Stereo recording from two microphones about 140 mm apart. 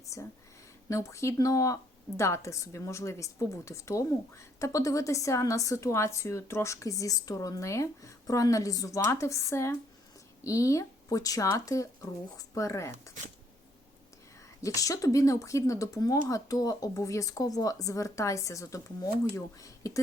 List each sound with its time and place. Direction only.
0.0 s a sound: 20° left (ahead or behind)
0.9 s speech: 20° left (ahead or behind)
14.6 s speech: 25° left (ahead or behind)